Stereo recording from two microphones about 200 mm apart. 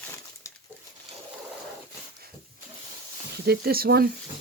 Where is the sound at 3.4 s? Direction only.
50° right (ahead or behind).